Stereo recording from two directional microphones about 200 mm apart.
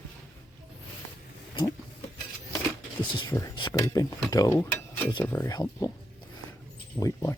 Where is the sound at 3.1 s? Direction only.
20° left (ahead or behind).